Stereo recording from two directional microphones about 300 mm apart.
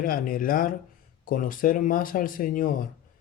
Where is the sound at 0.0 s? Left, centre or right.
Left.